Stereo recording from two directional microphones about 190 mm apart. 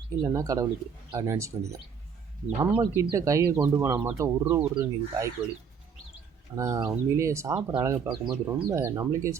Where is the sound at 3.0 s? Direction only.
15° right (ahead or behind).